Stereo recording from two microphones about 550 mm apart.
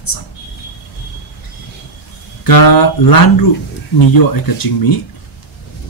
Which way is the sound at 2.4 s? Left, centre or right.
Left.